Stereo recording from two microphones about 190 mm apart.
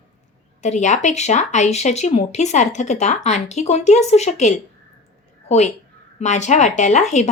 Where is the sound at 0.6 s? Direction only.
40° left (ahead or behind).